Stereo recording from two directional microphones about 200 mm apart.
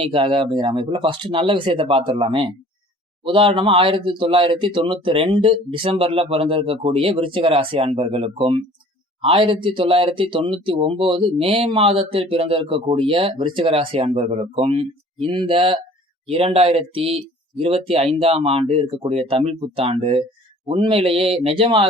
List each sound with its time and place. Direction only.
0.0 s speech: 25° right (ahead or behind)